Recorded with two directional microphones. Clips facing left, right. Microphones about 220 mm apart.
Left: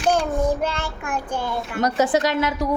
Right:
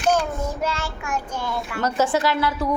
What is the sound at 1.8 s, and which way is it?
Speech, 15° left (ahead or behind).